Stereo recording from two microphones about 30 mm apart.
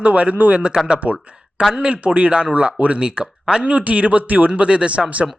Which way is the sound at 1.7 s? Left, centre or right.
Right.